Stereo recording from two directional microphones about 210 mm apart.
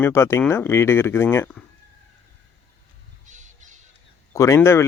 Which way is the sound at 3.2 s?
35° right (ahead or behind).